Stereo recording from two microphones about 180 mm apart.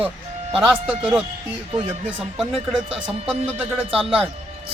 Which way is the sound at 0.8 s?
10° right (ahead or behind).